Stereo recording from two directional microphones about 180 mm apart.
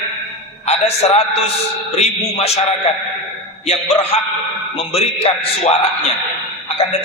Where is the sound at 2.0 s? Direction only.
35° left (ahead or behind).